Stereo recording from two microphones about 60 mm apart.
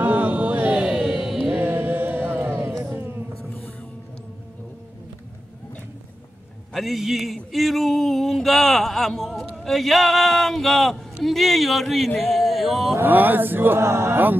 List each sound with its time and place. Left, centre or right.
0.0 s chant: right; by 1.4 s centre
1.6 s music: right
6.7 s speech: centre
12.2 s a sound: centre
13.0 s speech: right